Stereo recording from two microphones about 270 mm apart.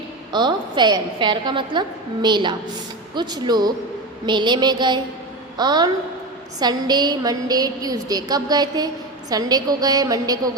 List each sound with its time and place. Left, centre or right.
0.3 s a woman's voice: centre